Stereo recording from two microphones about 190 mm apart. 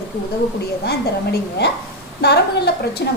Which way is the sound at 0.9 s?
60° left (ahead or behind).